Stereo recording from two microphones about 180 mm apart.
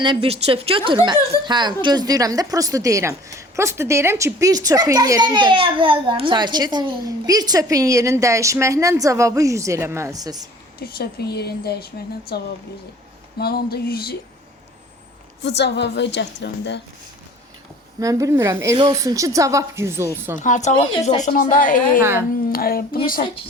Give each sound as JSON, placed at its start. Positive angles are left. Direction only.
{"t": 0.0, "sound": "a woman's voice", "side_deg": -30}
{"t": 10.8, "sound": "speech", "side_deg": 55}
{"t": 15.4, "sound": "a woman's voice", "side_deg": 70}
{"t": 18.0, "sound": "a woman's voice", "side_deg": -20}
{"t": 20.3, "sound": "a woman's voice", "side_deg": 45}
{"t": 20.7, "sound": "speech", "side_deg": 30}
{"t": 21.2, "sound": "a woman's voice", "side_deg": 40}